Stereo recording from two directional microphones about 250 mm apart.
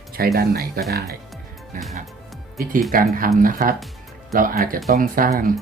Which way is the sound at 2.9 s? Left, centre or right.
Right.